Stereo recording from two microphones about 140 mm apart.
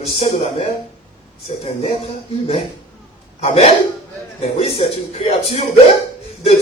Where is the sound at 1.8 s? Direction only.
45° left (ahead or behind).